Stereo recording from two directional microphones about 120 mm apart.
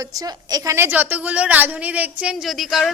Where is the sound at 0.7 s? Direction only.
20° right (ahead or behind).